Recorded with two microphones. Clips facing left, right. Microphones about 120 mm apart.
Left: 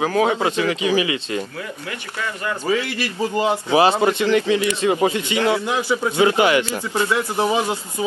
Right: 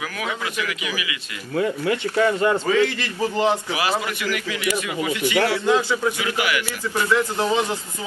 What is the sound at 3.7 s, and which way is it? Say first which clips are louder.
A man's voice: left 8 dB; 30° left (ahead or behind).